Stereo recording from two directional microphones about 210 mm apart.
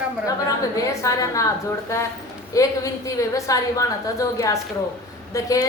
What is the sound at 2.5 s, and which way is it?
A woman's voice, 15° left (ahead or behind).